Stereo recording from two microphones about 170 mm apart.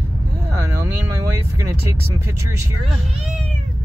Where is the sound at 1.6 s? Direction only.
15° right (ahead or behind).